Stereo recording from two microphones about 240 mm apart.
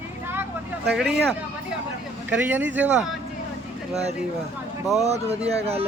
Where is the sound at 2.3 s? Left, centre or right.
Centre.